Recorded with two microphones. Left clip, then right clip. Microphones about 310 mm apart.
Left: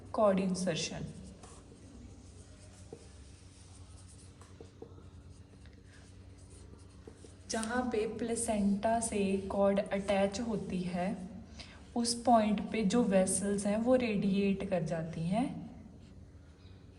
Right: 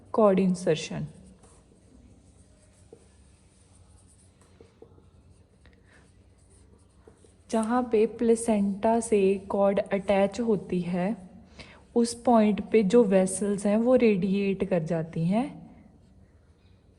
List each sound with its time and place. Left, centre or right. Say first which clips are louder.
0.1 s a woman's voice: right 7 dB; right
7.4 s a woman's voice: right 8 dB; centre